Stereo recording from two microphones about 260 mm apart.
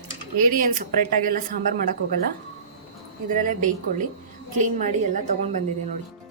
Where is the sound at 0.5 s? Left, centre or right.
Right.